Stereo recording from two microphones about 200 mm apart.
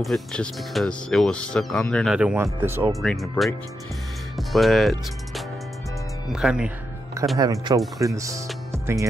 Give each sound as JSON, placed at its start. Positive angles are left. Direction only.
{"t": 0.0, "sound": "speech", "side_deg": 0}
{"t": 2.9, "sound": "speech", "side_deg": 0}
{"t": 7.3, "sound": "speech", "side_deg": -20}
{"t": 8.7, "sound": "music", "side_deg": -15}